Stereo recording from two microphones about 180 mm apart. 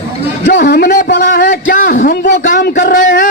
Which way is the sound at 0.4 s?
45° left (ahead or behind).